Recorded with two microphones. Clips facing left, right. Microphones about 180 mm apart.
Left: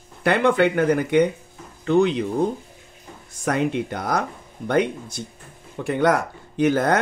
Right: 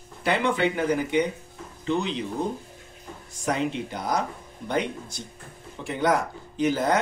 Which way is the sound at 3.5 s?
55° left (ahead or behind).